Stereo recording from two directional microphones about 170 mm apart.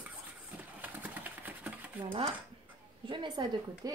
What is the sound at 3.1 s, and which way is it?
Speech, 25° right (ahead or behind).